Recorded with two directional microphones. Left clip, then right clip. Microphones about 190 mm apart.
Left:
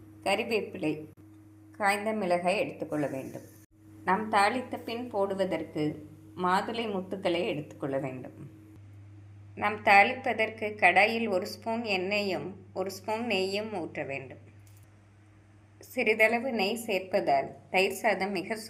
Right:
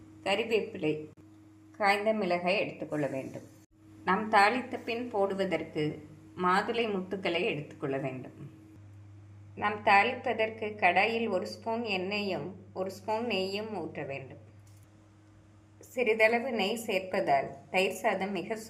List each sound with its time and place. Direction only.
0.2 s a woman's voice: 15° left (ahead or behind)
9.6 s a woman's voice: 10° left (ahead or behind)
16.0 s a woman's voice: 15° left (ahead or behind)